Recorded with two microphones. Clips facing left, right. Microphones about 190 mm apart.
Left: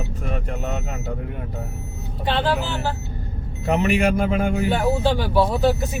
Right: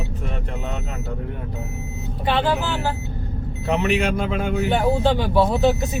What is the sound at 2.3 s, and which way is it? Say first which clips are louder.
Speech: right 1 dB; 15° right (ahead or behind).